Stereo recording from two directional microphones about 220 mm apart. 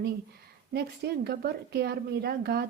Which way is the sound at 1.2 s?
45° right (ahead or behind).